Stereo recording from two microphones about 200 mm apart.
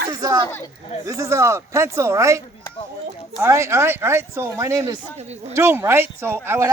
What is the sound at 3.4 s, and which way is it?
Speech, 15° right (ahead or behind).